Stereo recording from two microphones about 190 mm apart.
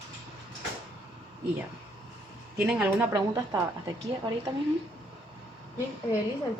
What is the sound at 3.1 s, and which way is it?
Speech, 15° right (ahead or behind).